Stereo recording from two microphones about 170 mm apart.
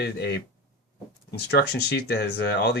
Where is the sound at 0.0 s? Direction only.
85° left.